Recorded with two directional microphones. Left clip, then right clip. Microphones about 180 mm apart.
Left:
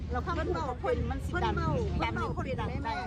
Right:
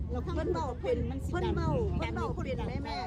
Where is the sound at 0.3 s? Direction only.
45° right (ahead or behind).